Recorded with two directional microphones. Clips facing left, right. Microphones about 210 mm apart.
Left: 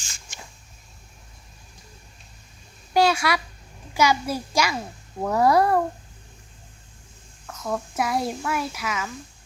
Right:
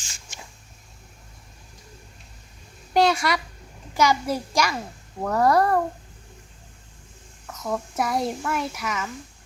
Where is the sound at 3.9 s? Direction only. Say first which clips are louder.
Even; 5° left (ahead or behind).